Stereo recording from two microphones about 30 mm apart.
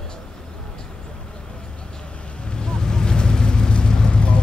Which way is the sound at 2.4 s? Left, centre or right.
Left.